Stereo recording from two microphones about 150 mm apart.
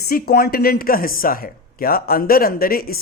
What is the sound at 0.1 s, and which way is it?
Speech, 90° left.